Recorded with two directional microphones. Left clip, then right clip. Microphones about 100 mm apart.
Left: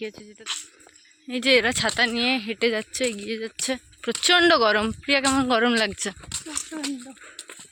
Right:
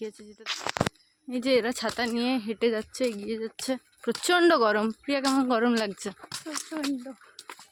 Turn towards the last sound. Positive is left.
turn(degrees=25)  # may be behind; listen again after turning